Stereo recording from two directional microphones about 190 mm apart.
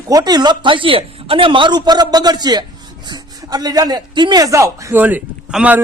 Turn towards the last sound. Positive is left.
turn(degrees=-5)  # may be behind; listen again after turning